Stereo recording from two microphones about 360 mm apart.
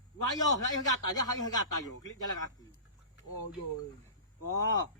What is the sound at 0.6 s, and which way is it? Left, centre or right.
Speech, left.